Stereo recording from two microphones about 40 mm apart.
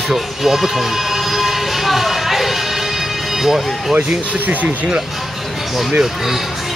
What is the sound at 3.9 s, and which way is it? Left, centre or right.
Speech, right.